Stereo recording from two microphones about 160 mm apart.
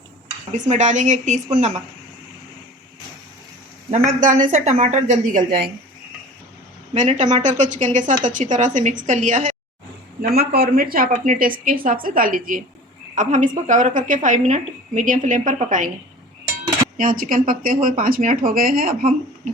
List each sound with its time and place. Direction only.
0.5 s a woman's voice: 50° right (ahead or behind)
3.9 s a woman's voice: 50° right (ahead or behind)
6.9 s a woman's voice: 50° right (ahead or behind)
10.2 s a woman's voice: 75° right (ahead or behind); by 15.9 s 55° right (ahead or behind)
17.0 s speech: 60° right (ahead or behind)